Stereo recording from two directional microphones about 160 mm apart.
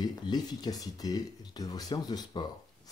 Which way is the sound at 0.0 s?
25° left (ahead or behind).